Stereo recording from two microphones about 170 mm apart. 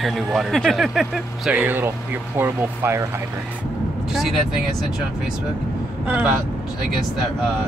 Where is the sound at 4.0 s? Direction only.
Centre (ahead or behind).